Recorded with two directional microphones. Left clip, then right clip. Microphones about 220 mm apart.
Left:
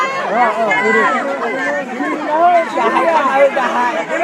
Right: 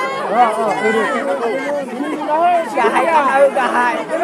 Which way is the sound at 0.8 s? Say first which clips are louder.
Left 3 dB; 35° right (ahead or behind).